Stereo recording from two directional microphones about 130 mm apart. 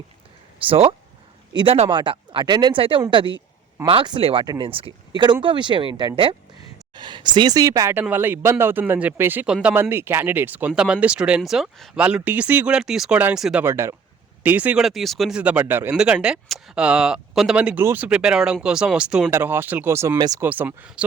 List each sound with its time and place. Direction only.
0.7 s speech: 45° right (ahead or behind)
1.9 s speech: 40° right (ahead or behind)
4.4 s speech: 30° right (ahead or behind)
4.7 s speech: 40° right (ahead or behind); by 9.7 s 10° right (ahead or behind)
9.9 s speech: 20° right (ahead or behind); by 12.0 s centre (ahead or behind)
12.0 s speech: 10° right (ahead or behind)
13.7 s speech: 20° right (ahead or behind)
14.8 s speech: centre (ahead or behind); by 20.1 s 20° right (ahead or behind)
20.1 s speech: 30° right (ahead or behind)
20.4 s speech: 15° right (ahead or behind)